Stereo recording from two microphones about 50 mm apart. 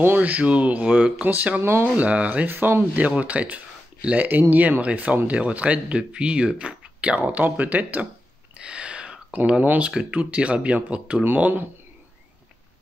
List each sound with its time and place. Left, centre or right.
0.2 s speech: right
1.6 s speech: right
2.0 s speech: right
2.9 s speech: right
8.5 s a sound: right
9.6 s speech: right
9.8 s speech: right
11.2 s speech: right